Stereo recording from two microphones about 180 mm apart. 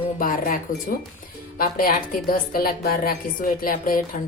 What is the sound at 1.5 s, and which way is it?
A woman's voice, 50° left (ahead or behind).